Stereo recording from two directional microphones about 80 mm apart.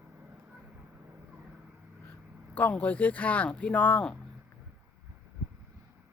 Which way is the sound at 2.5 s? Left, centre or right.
Centre.